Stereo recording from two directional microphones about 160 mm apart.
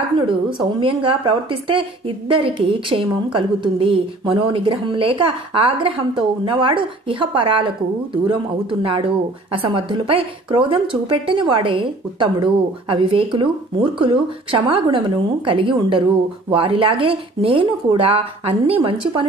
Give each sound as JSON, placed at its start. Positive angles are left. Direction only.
{"t": 0.3, "sound": "a woman's voice", "side_deg": -30}